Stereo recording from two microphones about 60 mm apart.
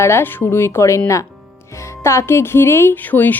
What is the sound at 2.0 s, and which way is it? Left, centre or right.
Speech, left.